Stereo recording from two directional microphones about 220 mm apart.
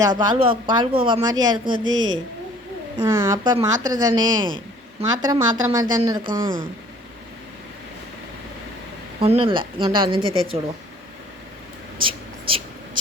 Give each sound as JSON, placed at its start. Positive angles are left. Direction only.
{"t": 0.0, "sound": "a woman's voice", "side_deg": -20}
{"t": 9.2, "sound": "a woman's voice", "side_deg": -25}
{"t": 11.9, "sound": "whispering", "side_deg": -25}